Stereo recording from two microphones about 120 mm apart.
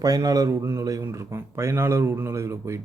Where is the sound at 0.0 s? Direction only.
30° right (ahead or behind).